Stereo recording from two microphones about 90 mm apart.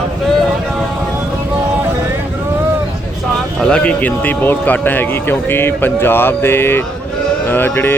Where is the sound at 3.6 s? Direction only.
10° left (ahead or behind).